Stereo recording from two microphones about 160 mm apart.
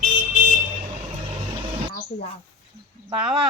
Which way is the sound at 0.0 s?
55° right (ahead or behind).